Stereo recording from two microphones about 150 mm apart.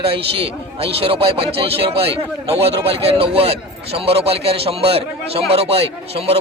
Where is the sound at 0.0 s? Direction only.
40° right (ahead or behind).